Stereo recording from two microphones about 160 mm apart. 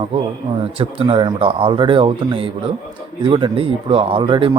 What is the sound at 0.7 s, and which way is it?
Speech, 35° right (ahead or behind).